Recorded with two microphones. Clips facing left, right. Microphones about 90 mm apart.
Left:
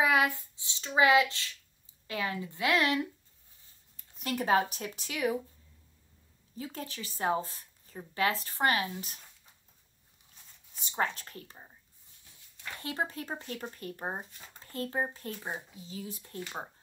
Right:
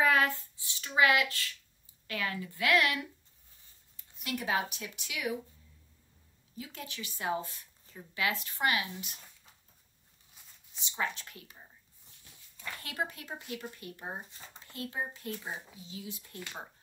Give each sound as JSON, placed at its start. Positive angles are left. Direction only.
{"t": 0.0, "sound": "child singing", "side_deg": 15}
{"t": 2.0, "sound": "a woman's voice", "side_deg": 25}
{"t": 3.9, "sound": "speech", "side_deg": 40}
{"t": 6.5, "sound": "a woman's voice", "side_deg": 35}
{"t": 10.7, "sound": "a woman's voice", "side_deg": 45}
{"t": 12.8, "sound": "a woman's voice", "side_deg": 30}